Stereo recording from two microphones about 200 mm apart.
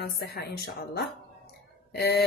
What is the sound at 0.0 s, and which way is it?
A woman's voice, 55° left (ahead or behind).